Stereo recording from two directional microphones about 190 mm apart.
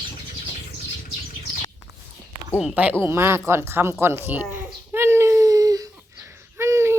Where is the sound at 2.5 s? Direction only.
5° right (ahead or behind).